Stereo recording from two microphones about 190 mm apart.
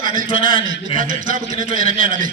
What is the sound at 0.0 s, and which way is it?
A man's voice, 45° right (ahead or behind).